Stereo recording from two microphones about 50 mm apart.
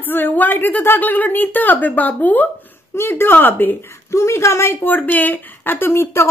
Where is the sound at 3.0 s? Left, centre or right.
Left.